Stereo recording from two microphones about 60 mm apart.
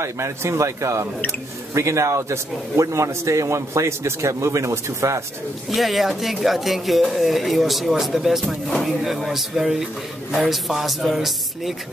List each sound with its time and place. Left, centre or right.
0.0 s a man's voice: right
5.7 s speech: centre